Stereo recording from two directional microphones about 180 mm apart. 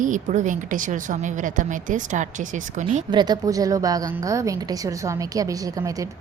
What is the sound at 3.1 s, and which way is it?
A woman's voice, 25° right (ahead or behind).